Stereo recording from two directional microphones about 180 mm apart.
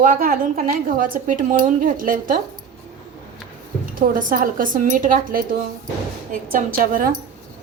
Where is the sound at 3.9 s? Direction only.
50° right (ahead or behind).